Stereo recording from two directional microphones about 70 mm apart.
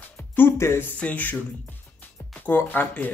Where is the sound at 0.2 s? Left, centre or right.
Left.